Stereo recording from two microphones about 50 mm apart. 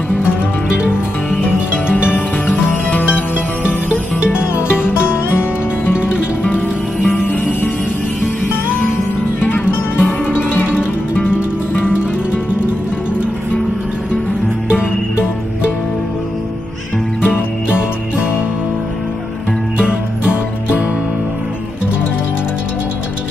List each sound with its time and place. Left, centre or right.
1.9 s music: right
2.4 s music: left
4.8 s music: left
6.5 s music: left
9.4 s music: left
17.6 s music: right